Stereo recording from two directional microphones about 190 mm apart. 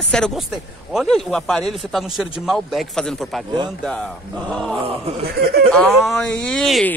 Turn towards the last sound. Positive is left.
turn(degrees=5)  # may be behind; listen again after turning